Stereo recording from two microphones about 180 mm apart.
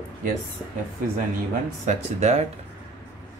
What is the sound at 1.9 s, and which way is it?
Speech, 40° right (ahead or behind).